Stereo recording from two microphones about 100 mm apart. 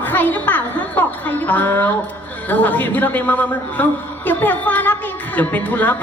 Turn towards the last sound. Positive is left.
turn(degrees=15)  # may be behind; listen again after turning